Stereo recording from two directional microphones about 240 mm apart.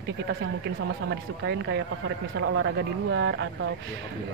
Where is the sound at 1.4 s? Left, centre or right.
Right.